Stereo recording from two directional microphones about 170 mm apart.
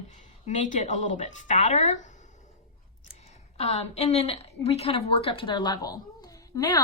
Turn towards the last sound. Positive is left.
turn(degrees=20)  # may be behind; listen again after turning